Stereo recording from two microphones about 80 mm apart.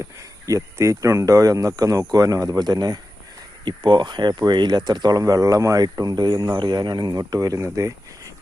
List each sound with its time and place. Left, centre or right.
0.2 s speech: right
3.6 s speech: right
5.2 s speech: right